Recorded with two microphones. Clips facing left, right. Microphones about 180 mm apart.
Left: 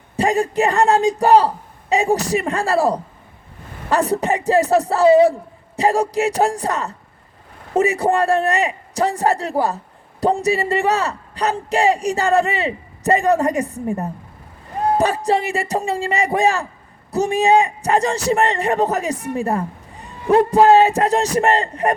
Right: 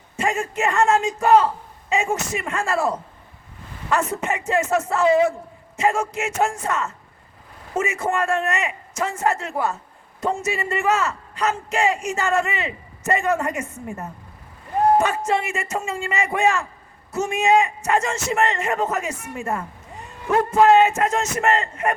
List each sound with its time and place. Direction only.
0.2 s a man's voice: 35° left (ahead or behind)